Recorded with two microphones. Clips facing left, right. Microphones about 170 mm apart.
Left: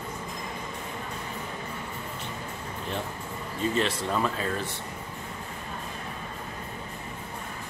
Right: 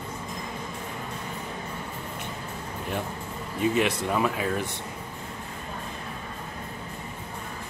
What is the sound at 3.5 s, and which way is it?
Speech, 15° right (ahead or behind).